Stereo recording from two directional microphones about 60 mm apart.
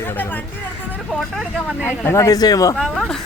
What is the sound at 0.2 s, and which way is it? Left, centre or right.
Speech, left.